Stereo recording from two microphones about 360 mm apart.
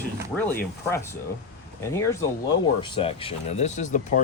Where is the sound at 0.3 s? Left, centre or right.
Centre.